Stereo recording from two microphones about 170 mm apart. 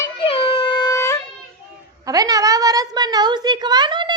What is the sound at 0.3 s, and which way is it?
Music, 35° left (ahead or behind).